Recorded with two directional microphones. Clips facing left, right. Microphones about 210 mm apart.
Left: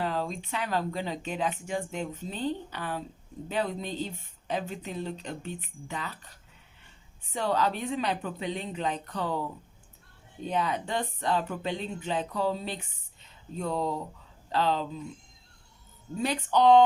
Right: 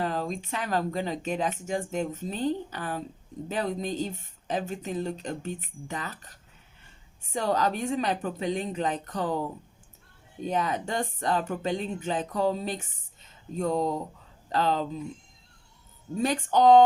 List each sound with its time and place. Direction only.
0.0 s speech: 45° right (ahead or behind)
7.3 s speech: 45° right (ahead or behind)
10.4 s speech: 45° right (ahead or behind)
16.2 s speech: 45° right (ahead or behind)